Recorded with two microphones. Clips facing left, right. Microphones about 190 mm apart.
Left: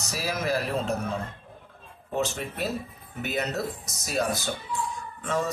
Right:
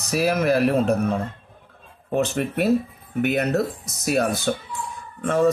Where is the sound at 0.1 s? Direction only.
60° right (ahead or behind).